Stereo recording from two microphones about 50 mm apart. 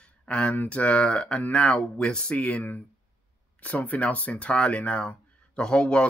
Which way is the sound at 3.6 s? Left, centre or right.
Left.